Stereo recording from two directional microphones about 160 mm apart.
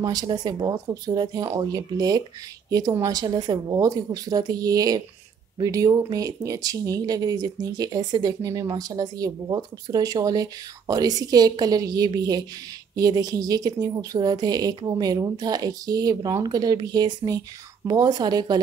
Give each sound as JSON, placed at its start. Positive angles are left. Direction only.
{"t": 0.0, "sound": "speech", "side_deg": -25}